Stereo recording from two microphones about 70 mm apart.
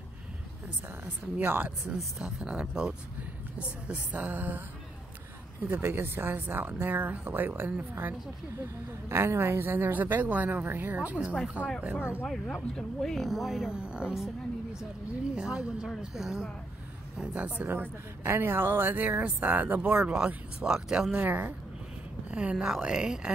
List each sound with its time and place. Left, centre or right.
1.0 s speech: right
2.1 s speech: centre; by 4.6 s right
5.7 s speech: right
9.1 s speech: right; by 11.5 s centre
11.8 s speech: right
12.3 s speech: centre
15.3 s speech: centre
17.3 s speech: right
21.1 s speech: right
22.3 s speech: centre